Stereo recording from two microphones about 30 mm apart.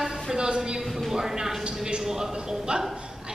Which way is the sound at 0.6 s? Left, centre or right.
Centre.